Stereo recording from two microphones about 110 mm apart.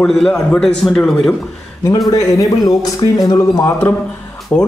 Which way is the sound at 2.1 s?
30° left (ahead or behind).